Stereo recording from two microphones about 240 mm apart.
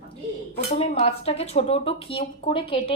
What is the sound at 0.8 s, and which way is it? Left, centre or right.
Speech, left.